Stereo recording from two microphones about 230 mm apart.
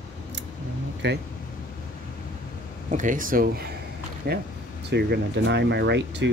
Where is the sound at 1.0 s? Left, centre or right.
Right.